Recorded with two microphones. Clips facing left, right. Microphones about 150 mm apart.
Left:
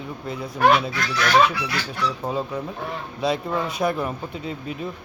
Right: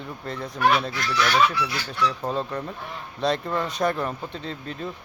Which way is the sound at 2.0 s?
5° left (ahead or behind).